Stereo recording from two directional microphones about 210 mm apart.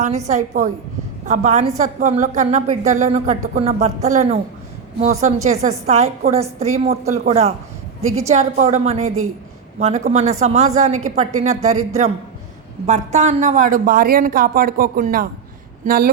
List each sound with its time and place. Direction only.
0.3 s a woman's voice: 35° right (ahead or behind)
9.0 s a woman's voice: 85° right
9.7 s a woman's voice: 35° right (ahead or behind)
12.8 s a woman's voice: 35° right (ahead or behind)